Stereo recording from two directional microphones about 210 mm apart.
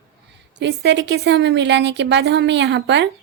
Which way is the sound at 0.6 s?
55° right (ahead or behind).